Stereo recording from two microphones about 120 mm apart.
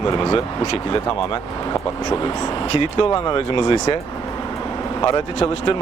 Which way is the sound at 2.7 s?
50° left (ahead or behind).